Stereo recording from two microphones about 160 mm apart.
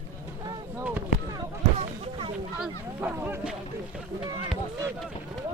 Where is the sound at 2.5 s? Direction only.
10° right (ahead or behind).